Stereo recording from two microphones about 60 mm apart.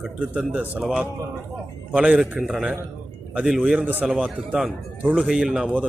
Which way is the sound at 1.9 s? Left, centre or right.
Centre.